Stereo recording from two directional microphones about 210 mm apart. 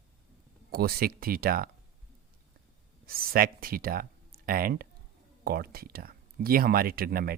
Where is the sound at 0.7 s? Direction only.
45° right (ahead or behind).